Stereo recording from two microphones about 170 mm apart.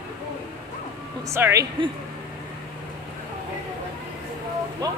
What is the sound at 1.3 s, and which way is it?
Speech, 15° right (ahead or behind).